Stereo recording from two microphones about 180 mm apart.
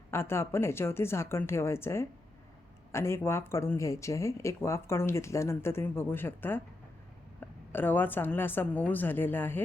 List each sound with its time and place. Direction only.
0.1 s speech: 15° left (ahead or behind)